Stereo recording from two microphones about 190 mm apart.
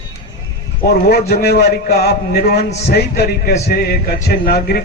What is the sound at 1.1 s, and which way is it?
A man's voice, 55° left (ahead or behind).